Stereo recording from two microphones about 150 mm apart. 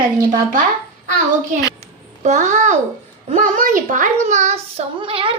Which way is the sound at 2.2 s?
55° right (ahead or behind).